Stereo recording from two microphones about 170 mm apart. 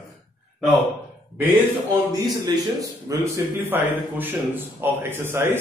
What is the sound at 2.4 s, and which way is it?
A man's voice, 20° right (ahead or behind).